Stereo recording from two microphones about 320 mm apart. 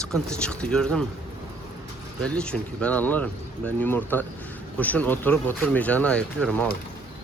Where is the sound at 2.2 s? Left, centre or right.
Centre.